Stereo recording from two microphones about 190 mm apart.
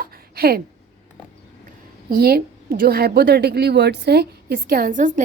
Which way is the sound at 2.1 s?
55° right (ahead or behind).